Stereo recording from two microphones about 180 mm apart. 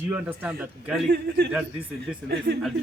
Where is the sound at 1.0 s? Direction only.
60° right (ahead or behind).